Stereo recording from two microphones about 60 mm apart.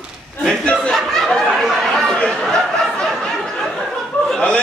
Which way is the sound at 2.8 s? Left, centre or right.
Centre.